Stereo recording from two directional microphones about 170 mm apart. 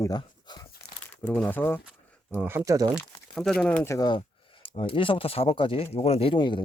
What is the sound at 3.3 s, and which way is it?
Speech, centre (ahead or behind).